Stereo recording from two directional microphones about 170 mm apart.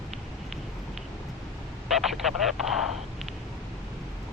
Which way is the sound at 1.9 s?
Centre (ahead or behind).